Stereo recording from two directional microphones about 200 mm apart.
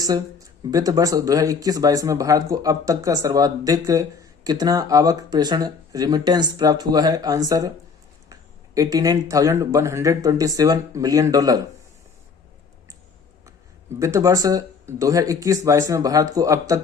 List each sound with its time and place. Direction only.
0.0 s speech: 15° right (ahead or behind)
14.0 s speech: 15° right (ahead or behind)